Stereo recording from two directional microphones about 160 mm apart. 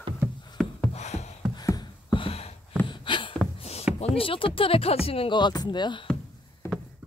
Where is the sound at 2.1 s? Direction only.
40° left (ahead or behind).